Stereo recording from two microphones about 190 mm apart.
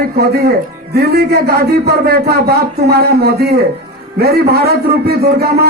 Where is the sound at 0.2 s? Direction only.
55° right (ahead or behind).